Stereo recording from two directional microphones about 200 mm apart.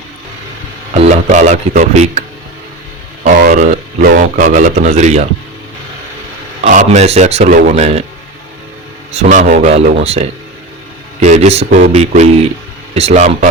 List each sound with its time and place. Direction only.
0.9 s speech: 35° right (ahead or behind)
3.2 s speech: 40° right (ahead or behind)
6.7 s speech: 35° right (ahead or behind)
9.2 s speech: 40° right (ahead or behind)